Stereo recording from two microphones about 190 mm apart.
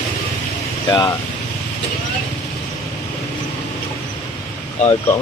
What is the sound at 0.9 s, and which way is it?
Speech, 15° left (ahead or behind).